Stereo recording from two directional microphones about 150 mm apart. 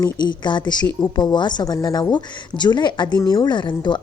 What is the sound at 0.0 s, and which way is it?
A woman's voice, 30° left (ahead or behind).